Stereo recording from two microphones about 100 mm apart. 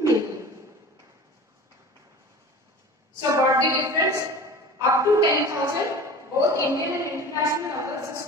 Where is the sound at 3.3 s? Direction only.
30° right (ahead or behind).